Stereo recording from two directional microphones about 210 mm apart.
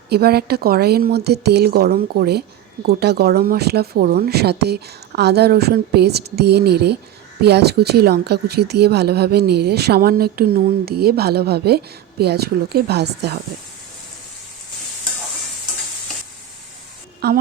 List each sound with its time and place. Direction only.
0.1 s a woman's voice: 50° right (ahead or behind)
17.2 s a woman's voice: 45° right (ahead or behind)